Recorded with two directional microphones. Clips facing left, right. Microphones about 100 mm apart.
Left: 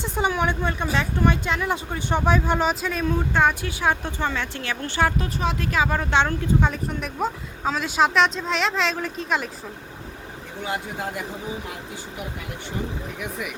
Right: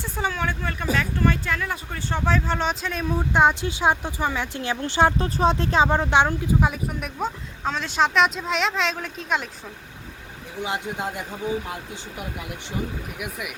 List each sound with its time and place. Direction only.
0.0 s speech: 20° left (ahead or behind)
3.1 s speech: 20° right (ahead or behind); by 9.5 s centre (ahead or behind)
10.6 s speech: 20° right (ahead or behind)
13.1 s speech: 5° right (ahead or behind)